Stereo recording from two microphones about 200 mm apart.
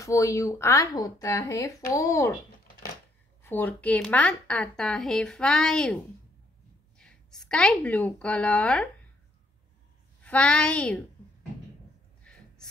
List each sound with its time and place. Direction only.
0.0 s a woman's voice: 15° left (ahead or behind)
3.4 s a woman's voice: 10° left (ahead or behind)
7.0 s a woman's voice: 5° left (ahead or behind)
10.2 s a woman's voice: 5° left (ahead or behind)
12.2 s gasp: 5° left (ahead or behind)